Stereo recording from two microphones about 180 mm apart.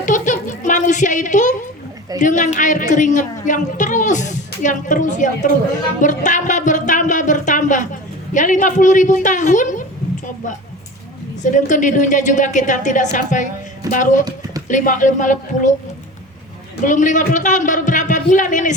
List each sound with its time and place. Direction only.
0.0 s a sound: 45° left (ahead or behind)
2.2 s a woman's voice: 45° left (ahead or behind)
11.5 s a woman's voice: 45° left (ahead or behind)
16.8 s a woman's voice: 45° left (ahead or behind)